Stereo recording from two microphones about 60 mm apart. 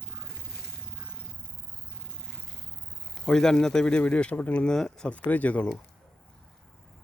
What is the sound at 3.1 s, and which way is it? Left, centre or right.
Speech, centre.